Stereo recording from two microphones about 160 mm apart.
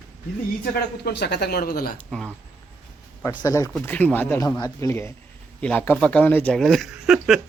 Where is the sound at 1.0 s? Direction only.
90° left; by 1.9 s 70° left (ahead or behind).